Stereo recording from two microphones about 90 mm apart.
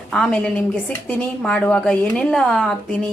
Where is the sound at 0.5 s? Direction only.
20° left (ahead or behind).